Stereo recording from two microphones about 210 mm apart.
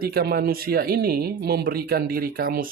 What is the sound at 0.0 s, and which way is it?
Speech, 50° right (ahead or behind).